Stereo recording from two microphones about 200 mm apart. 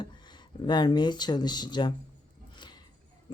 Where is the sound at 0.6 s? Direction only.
20° left (ahead or behind).